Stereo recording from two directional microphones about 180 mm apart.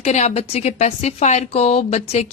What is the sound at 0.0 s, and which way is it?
Speech, 40° left (ahead or behind).